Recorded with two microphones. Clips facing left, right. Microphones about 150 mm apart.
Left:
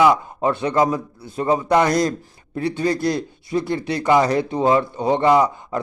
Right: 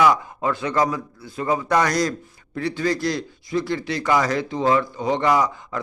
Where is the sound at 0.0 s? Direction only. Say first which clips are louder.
Left 2 dB; 25° left (ahead or behind).